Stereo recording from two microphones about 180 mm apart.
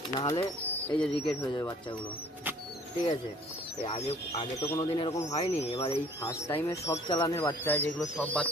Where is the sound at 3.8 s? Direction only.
35° left (ahead or behind).